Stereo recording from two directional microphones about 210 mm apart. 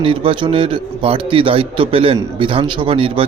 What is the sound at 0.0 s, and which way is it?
A man's voice, 25° right (ahead or behind).